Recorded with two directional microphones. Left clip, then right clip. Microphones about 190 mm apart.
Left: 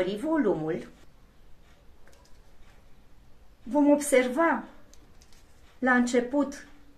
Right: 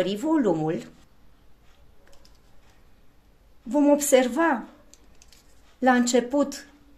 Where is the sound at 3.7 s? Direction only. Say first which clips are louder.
Right 3 dB; 35° right (ahead or behind).